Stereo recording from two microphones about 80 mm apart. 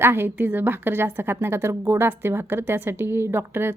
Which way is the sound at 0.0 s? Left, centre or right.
Right.